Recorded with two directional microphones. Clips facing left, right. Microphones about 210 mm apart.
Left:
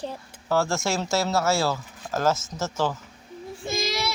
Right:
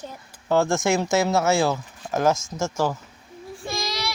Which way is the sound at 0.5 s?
15° right (ahead or behind).